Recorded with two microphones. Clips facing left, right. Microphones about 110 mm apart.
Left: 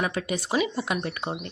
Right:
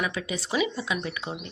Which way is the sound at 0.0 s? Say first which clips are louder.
Left 3 dB; 45° left (ahead or behind).